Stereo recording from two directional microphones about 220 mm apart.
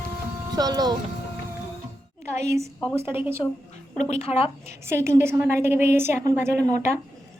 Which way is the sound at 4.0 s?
30° left (ahead or behind).